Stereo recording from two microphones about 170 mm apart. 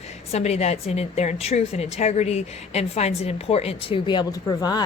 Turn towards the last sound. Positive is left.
turn(degrees=25)  # may be behind; listen again after turning